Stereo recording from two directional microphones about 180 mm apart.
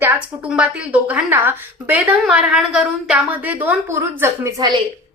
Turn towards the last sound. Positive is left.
turn(degrees=-20)  # may be behind; listen again after turning